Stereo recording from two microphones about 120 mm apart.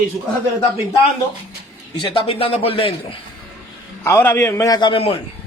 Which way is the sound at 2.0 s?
50° left (ahead or behind).